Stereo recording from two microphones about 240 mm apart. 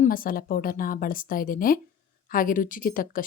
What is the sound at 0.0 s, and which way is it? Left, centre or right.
A woman's voice, left.